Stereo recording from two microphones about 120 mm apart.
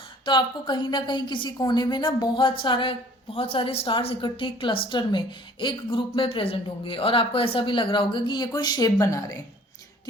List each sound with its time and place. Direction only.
0.3 s a woman's voice: 40° left (ahead or behind)